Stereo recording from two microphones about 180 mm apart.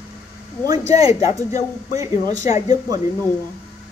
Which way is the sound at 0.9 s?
20° right (ahead or behind).